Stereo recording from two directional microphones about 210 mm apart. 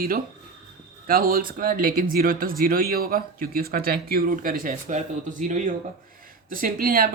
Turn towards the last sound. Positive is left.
turn(degrees=-45)  # may be behind; listen again after turning